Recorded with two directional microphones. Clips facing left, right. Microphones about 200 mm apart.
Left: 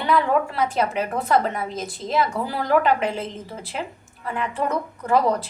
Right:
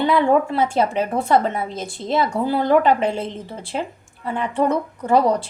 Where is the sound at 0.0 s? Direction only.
25° right (ahead or behind).